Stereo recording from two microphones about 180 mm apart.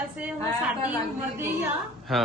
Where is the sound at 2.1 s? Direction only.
Centre (ahead or behind).